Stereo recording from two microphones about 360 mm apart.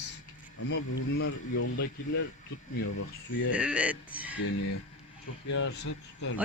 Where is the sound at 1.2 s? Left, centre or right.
Left.